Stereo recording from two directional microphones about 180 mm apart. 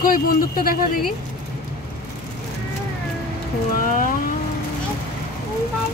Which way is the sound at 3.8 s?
50° left (ahead or behind).